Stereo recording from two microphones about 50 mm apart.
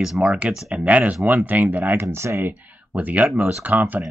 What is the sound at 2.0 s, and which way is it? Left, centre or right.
Speech, right.